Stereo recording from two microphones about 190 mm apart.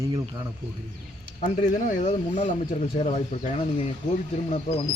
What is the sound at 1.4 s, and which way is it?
Speech, 40° left (ahead or behind).